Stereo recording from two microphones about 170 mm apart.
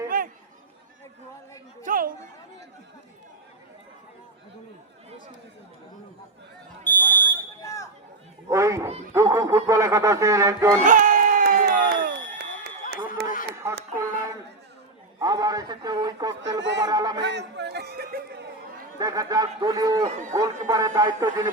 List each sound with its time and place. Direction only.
0.1 s chatter: 55° right (ahead or behind)
1.8 s chatter: 55° right (ahead or behind)
6.8 s smoke detector: 10° left (ahead or behind)
8.4 s cat: 15° right (ahead or behind)
9.1 s a sound: 15° right (ahead or behind)
10.8 s crowd: 50° right (ahead or behind); by 12.7 s 65° right (ahead or behind)
13.2 s a sound: 70° right (ahead or behind)
13.9 s a sound: 20° right (ahead or behind)
15.2 s a man's voice: 20° right (ahead or behind)
16.4 s speech: 90° right
16.8 s a man's voice: 25° right (ahead or behind)
17.2 s a sound: 90° right; by 18.4 s 70° right (ahead or behind)
18.9 s a man's voice: 20° right (ahead or behind)